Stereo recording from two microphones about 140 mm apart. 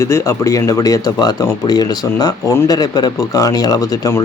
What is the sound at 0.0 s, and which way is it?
Speech, 20° left (ahead or behind).